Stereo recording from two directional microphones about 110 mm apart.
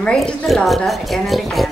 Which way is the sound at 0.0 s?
5° left (ahead or behind).